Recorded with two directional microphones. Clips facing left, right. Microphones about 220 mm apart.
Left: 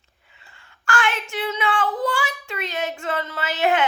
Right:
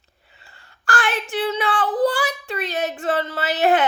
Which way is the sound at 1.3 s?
35° right (ahead or behind).